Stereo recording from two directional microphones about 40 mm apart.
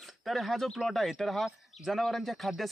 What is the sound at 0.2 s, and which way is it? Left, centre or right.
Speech, centre.